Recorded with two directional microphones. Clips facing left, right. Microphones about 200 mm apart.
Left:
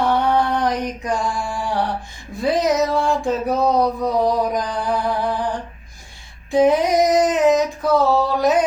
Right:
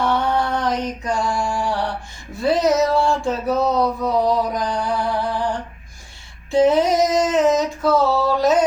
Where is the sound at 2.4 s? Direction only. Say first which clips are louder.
Right 1 dB; 15° left (ahead or behind).